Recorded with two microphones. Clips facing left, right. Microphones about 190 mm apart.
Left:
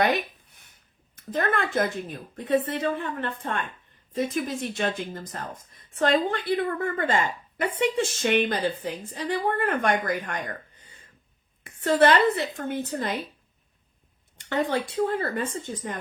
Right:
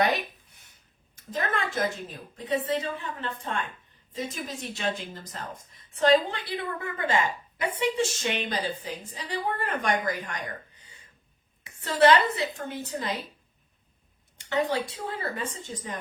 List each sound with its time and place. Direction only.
1.1 s speech: 55° left (ahead or behind)
14.7 s speech: 55° left (ahead or behind)